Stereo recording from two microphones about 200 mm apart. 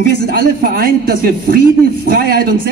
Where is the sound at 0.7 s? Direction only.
50° right (ahead or behind).